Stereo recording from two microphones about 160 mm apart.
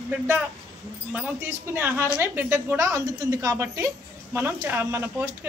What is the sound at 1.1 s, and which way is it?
A woman's voice, 10° right (ahead or behind).